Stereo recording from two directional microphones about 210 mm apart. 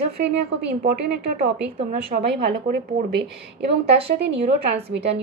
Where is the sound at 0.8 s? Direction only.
40° right (ahead or behind).